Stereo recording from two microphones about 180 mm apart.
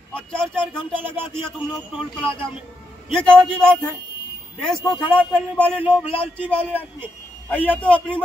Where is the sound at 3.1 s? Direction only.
5° left (ahead or behind).